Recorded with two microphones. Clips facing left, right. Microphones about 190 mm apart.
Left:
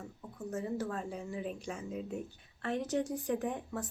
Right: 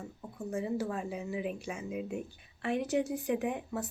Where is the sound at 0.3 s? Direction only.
10° right (ahead or behind).